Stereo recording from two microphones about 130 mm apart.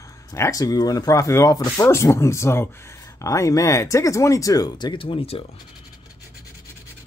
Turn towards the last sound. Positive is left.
turn(degrees=45)  # may be behind; listen again after turning